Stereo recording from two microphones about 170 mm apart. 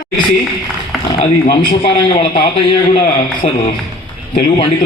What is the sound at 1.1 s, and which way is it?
Speech, 35° left (ahead or behind).